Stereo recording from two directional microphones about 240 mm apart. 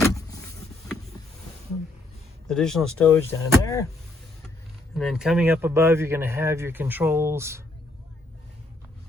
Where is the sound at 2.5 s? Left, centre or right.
Centre.